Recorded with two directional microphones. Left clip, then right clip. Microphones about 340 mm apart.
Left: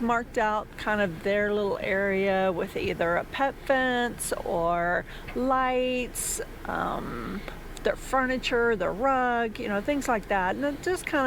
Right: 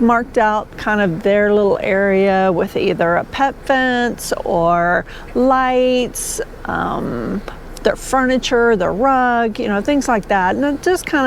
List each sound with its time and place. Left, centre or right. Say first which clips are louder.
0.1 s speech: right 7 dB; right